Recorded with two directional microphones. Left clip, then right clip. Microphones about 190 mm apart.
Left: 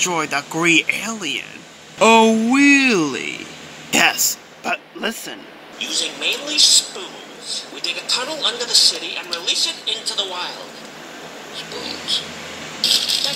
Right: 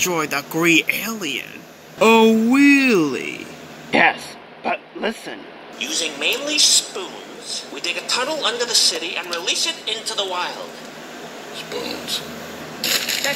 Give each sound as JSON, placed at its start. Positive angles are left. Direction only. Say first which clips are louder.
{"t": 0.0, "sound": "a man's voice", "louder": "left 1 dB", "side_deg": 0}
{"t": 3.9, "sound": "speech", "louder": "even", "side_deg": 25}
{"t": 5.8, "sound": "a woman's voice", "louder": "even", "side_deg": -30}
{"t": 11.7, "sound": "speech", "louder": "right 2 dB", "side_deg": -10}
{"t": 12.8, "sound": "speech", "louder": "left 4 dB", "side_deg": -35}